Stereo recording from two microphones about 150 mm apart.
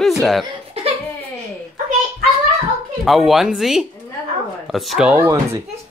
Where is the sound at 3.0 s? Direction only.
Centre (ahead or behind).